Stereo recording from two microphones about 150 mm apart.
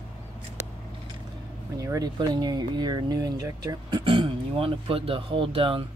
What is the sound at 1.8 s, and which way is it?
Speech, 25° right (ahead or behind).